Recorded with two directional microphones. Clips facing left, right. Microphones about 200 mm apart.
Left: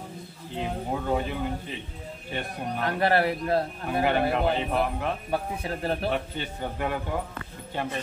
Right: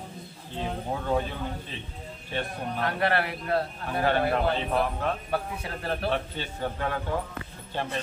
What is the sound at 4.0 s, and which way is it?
Speech, 15° left (ahead or behind).